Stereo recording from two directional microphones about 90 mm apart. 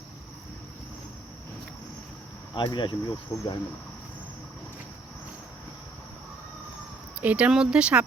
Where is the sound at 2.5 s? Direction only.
60° left (ahead or behind).